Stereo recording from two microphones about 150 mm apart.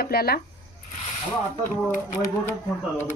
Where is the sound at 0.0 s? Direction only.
90° left.